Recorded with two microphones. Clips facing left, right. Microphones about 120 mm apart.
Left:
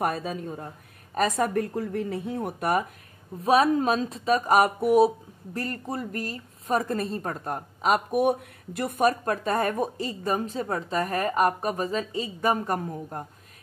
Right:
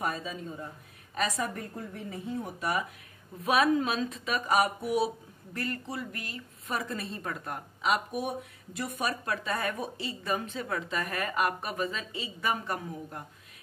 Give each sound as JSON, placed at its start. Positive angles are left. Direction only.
{"t": 0.0, "sound": "speech", "side_deg": 60}
{"t": 1.1, "sound": "speech", "side_deg": 50}
{"t": 3.3, "sound": "speech", "side_deg": 35}
{"t": 8.2, "sound": "speech", "side_deg": 60}